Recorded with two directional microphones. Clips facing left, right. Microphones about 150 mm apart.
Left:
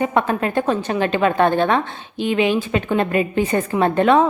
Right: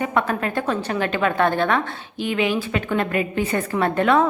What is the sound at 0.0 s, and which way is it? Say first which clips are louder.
A woman's voice: left 3 dB; 25° left (ahead or behind).